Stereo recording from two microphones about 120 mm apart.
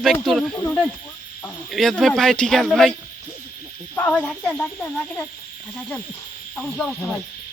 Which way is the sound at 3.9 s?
15° left (ahead or behind).